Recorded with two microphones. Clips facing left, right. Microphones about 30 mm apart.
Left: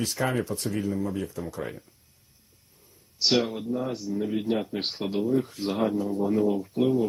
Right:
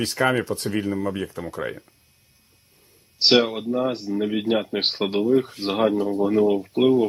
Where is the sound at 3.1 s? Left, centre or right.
Right.